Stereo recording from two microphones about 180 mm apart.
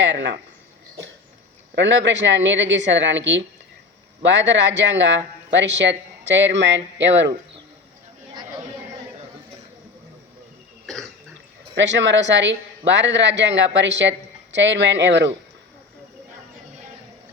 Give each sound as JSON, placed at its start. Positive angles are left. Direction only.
{"t": 0.0, "sound": "speech", "side_deg": -85}
{"t": 1.7, "sound": "speech", "side_deg": -85}
{"t": 11.7, "sound": "speech", "side_deg": -90}